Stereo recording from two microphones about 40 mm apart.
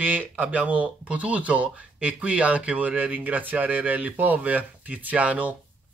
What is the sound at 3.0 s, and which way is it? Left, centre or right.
Speech, right.